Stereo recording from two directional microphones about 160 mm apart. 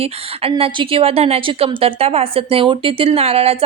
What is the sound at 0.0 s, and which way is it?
A woman's voice, 35° right (ahead or behind).